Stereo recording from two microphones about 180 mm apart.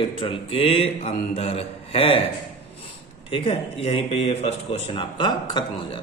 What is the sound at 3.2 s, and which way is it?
Speech, 30° left (ahead or behind).